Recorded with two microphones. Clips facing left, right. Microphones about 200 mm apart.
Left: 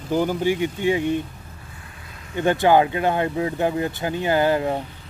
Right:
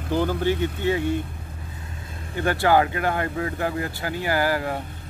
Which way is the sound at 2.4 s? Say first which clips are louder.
Left 3 dB; 20° left (ahead or behind).